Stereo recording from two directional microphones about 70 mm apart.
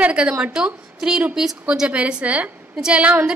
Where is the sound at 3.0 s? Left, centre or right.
Right.